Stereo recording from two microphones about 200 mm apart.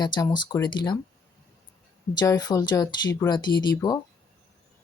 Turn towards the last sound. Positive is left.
turn(degrees=20)  # may be behind; listen again after turning